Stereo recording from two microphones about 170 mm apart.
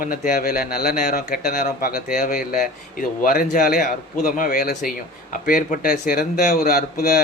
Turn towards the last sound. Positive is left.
turn(degrees=60)  # may be behind; listen again after turning